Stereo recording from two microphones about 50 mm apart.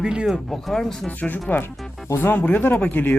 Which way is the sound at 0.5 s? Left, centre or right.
Centre.